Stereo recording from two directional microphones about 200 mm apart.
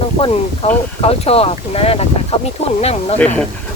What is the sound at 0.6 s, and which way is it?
Speech, 30° left (ahead or behind).